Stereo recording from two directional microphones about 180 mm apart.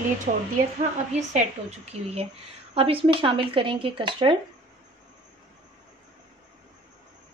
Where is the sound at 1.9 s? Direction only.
35° right (ahead or behind).